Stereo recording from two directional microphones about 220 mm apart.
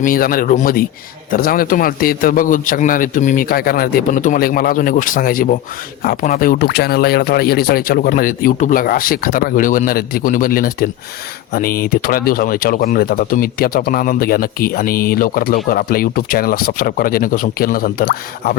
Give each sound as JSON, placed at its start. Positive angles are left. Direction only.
{"t": 0.0, "sound": "speech", "side_deg": 40}